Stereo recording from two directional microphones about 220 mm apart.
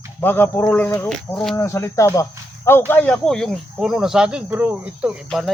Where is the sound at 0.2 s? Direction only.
10° left (ahead or behind).